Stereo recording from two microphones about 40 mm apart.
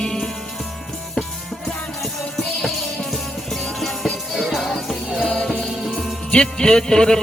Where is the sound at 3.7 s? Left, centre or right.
Centre.